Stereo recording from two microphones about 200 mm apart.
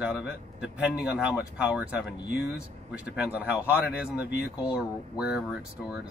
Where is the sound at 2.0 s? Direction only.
60° left (ahead or behind).